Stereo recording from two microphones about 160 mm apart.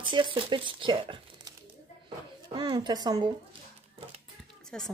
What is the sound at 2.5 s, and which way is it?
Speech, 30° right (ahead or behind).